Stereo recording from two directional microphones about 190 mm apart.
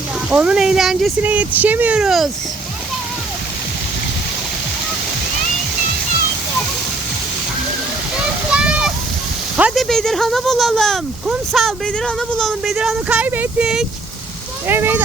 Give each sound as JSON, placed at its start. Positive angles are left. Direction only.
{"t": 0.3, "sound": "speech", "side_deg": -5}
{"t": 8.4, "sound": "a sound", "side_deg": -5}
{"t": 9.6, "sound": "speech", "side_deg": -5}